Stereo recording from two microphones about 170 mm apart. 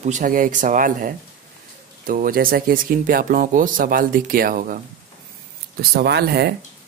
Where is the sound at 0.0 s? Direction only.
50° right (ahead or behind).